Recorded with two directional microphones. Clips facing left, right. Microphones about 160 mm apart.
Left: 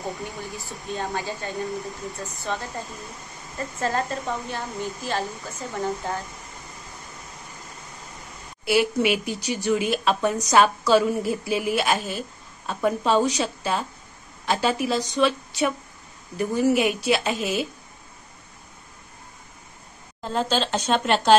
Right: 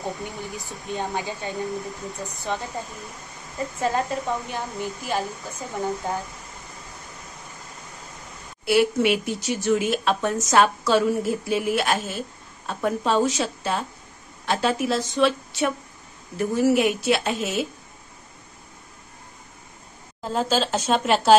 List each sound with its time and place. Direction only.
0.0 s a woman's voice: 20° right (ahead or behind)
8.6 s speech: centre (ahead or behind)
20.2 s speech: 5° right (ahead or behind)